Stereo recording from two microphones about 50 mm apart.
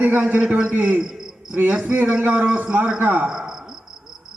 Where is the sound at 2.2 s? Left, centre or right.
Right.